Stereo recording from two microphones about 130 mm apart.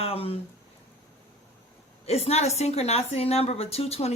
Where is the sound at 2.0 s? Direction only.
50° left (ahead or behind).